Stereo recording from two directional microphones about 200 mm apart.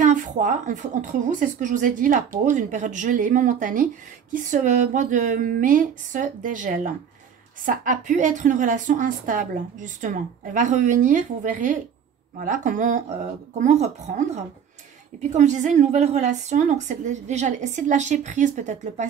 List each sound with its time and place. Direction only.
0.0 s a woman's voice: 40° right (ahead or behind)